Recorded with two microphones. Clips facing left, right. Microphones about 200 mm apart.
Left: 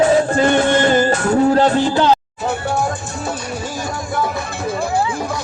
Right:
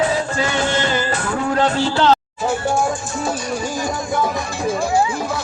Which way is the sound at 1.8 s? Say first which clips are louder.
Left 1 dB; 15° left (ahead or behind).